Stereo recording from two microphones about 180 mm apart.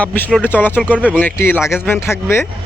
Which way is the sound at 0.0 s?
10° left (ahead or behind).